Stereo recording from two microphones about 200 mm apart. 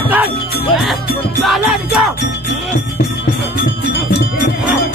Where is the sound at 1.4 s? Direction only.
Centre (ahead or behind).